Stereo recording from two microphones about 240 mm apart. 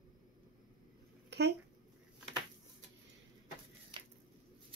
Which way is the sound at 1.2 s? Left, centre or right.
Right.